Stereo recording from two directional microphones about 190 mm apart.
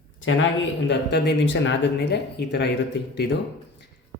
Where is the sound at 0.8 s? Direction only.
65° left (ahead or behind).